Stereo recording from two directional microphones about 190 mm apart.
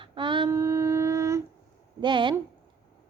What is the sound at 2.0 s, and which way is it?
Speech, 25° right (ahead or behind).